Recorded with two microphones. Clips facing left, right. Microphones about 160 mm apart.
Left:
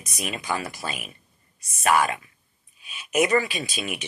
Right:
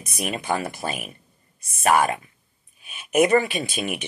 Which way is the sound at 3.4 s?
55° right (ahead or behind).